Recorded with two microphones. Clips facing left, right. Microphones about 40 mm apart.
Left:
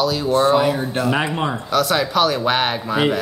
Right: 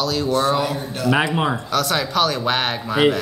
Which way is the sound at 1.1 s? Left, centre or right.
Centre.